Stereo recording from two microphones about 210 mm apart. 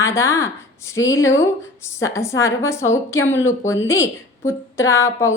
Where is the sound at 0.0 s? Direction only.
15° left (ahead or behind).